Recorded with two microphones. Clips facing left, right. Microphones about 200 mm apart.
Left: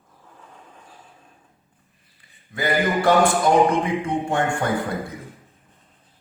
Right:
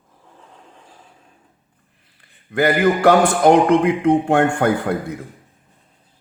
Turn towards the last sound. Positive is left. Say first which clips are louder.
# right 5 dB
turn(degrees=-65)  # may be behind; listen again after turning